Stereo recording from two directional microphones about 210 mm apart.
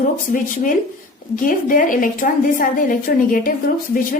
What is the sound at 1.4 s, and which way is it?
A woman's voice, 40° left (ahead or behind).